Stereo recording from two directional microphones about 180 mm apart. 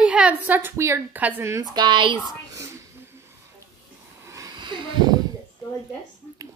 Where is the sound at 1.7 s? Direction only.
25° right (ahead or behind).